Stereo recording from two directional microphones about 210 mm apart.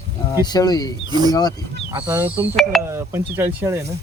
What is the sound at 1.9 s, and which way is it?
Speech, 10° right (ahead or behind).